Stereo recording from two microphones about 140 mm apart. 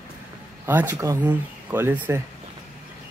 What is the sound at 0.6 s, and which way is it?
Speech, 15° right (ahead or behind).